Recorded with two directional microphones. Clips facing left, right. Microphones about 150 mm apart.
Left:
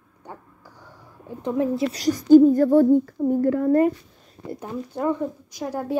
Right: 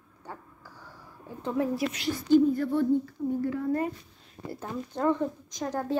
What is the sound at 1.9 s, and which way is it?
A woman's voice, 40° left (ahead or behind).